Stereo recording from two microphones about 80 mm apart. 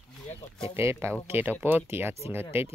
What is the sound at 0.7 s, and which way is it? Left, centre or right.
Speech, right.